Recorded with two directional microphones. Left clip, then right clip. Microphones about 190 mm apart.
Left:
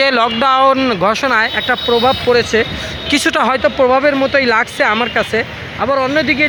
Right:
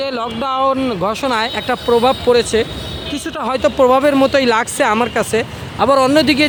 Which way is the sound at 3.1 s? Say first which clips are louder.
Left 12 dB; 15° left (ahead or behind).